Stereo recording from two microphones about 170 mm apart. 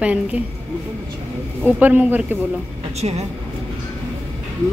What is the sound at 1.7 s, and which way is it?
Speech, 10° right (ahead or behind).